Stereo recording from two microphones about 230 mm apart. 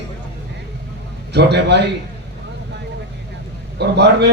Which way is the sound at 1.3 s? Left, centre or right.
Right.